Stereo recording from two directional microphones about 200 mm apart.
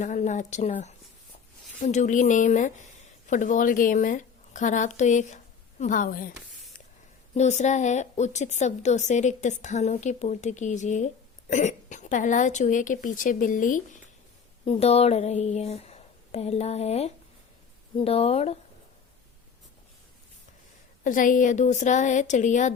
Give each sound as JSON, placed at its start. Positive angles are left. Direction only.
{"t": 0.0, "sound": "a woman's voice", "side_deg": 35}
{"t": 7.3, "sound": "a woman's voice", "side_deg": 35}
{"t": 14.6, "sound": "a woman's voice", "side_deg": 30}
{"t": 21.0, "sound": "a woman's voice", "side_deg": 40}